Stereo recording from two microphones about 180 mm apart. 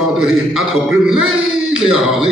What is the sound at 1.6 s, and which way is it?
Speech, 5° right (ahead or behind).